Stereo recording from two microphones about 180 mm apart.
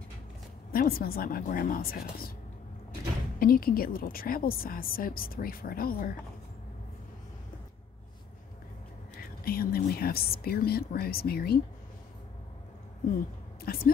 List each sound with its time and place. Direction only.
0.7 s speech: 55° left (ahead or behind)
3.3 s a woman's voice: 55° left (ahead or behind)
9.4 s speech: 55° left (ahead or behind)
13.7 s speech: 55° left (ahead or behind)